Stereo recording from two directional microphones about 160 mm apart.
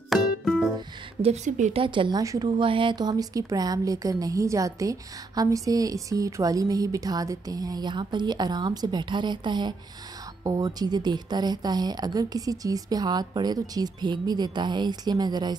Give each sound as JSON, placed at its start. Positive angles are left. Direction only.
{"t": 0.1, "sound": "music", "side_deg": 0}
{"t": 1.2, "sound": "speech", "side_deg": -45}
{"t": 1.8, "sound": "speech", "side_deg": -30}